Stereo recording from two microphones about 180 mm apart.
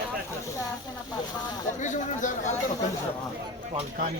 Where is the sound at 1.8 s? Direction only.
45° left (ahead or behind).